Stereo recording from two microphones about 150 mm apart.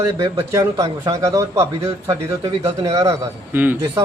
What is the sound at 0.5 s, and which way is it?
Speech, 25° right (ahead or behind).